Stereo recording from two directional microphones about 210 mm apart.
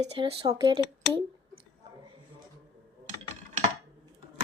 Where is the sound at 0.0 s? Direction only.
25° right (ahead or behind).